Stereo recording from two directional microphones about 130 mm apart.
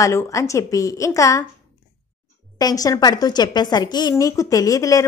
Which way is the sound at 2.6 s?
30° left (ahead or behind).